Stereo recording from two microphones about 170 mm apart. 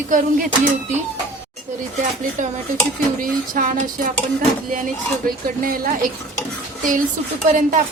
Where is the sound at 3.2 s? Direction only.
50° right (ahead or behind).